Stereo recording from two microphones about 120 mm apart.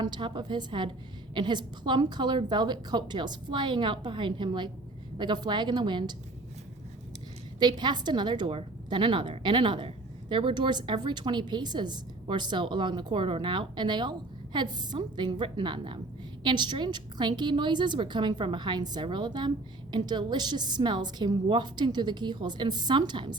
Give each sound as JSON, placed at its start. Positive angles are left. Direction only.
{"t": 0.0, "sound": "a woman's voice", "side_deg": -40}
{"t": 7.6, "sound": "a woman's voice", "side_deg": -40}